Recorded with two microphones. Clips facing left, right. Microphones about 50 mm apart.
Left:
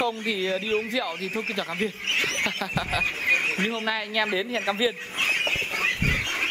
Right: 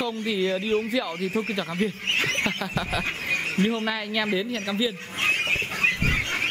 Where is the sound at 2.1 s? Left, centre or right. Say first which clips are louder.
Right 1 dB; centre.